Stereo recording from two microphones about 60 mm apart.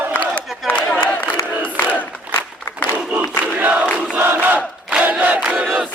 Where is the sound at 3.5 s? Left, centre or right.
Right.